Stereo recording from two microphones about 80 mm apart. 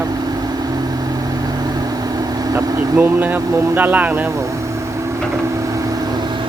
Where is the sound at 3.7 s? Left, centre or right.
Right.